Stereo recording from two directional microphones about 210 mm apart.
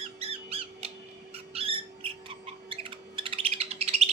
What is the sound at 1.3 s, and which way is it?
Owl, 25° right (ahead or behind).